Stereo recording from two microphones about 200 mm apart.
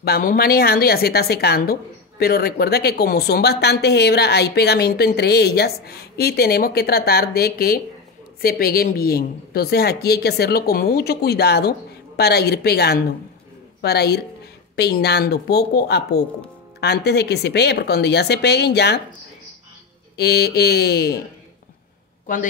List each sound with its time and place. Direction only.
0.0 s a woman's voice: 50° left (ahead or behind)
20.2 s a woman's voice: 55° left (ahead or behind)